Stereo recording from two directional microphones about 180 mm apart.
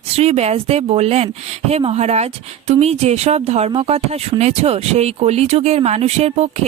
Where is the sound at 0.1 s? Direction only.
35° right (ahead or behind).